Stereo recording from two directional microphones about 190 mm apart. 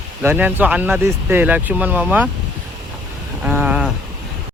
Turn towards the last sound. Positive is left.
turn(degrees=-5)  # may be behind; listen again after turning